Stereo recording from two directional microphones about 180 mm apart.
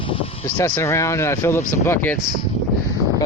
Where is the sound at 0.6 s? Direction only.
15° left (ahead or behind).